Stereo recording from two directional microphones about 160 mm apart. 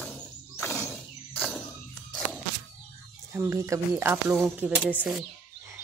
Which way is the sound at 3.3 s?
15° right (ahead or behind).